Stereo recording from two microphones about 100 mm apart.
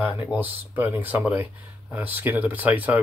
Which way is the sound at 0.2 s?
20° right (ahead or behind).